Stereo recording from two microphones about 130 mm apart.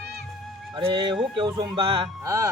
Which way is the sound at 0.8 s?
40° right (ahead or behind).